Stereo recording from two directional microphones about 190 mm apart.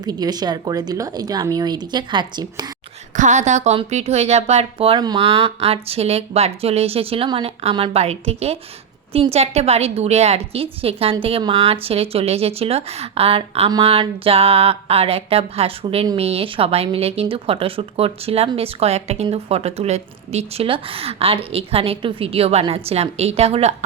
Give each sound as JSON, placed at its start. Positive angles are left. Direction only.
{"t": 0.0, "sound": "speech", "side_deg": -20}
{"t": 3.2, "sound": "a woman's voice", "side_deg": -40}